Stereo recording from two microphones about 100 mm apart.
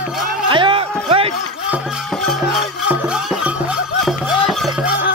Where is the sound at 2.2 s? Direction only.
Centre (ahead or behind).